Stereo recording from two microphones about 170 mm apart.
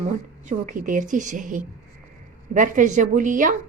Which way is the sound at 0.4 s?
50° right (ahead or behind).